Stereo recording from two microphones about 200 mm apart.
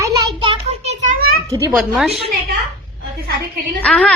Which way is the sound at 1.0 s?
45° right (ahead or behind).